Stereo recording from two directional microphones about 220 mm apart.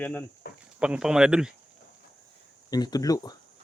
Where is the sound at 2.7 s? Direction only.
15° left (ahead or behind).